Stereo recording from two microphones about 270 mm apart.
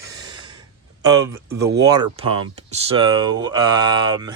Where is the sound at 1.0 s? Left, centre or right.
Centre.